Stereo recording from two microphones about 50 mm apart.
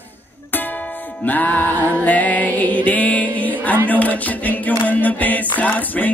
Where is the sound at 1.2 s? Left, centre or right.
Left.